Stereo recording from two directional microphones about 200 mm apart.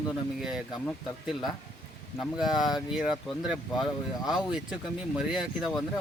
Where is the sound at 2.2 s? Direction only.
Centre (ahead or behind).